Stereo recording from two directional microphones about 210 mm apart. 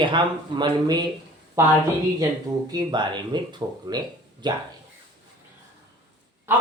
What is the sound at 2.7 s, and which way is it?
Speech, 20° right (ahead or behind).